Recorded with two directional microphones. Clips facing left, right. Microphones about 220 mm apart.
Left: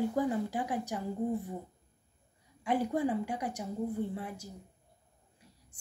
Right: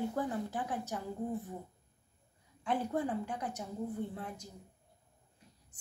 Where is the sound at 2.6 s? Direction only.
10° left (ahead or behind).